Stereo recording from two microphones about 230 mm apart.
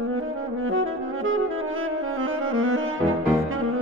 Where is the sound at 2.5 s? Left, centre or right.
Right.